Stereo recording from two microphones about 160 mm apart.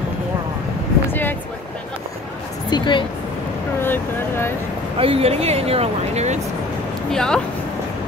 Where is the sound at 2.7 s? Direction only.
30° left (ahead or behind).